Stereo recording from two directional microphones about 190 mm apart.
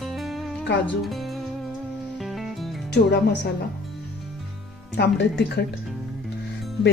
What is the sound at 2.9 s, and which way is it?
Speech, 60° left (ahead or behind).